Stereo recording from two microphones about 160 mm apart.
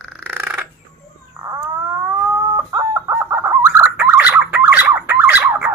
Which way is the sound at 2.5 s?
15° right (ahead or behind).